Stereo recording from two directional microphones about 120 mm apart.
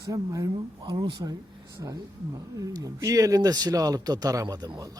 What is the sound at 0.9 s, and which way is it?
Speech, 50° right (ahead or behind).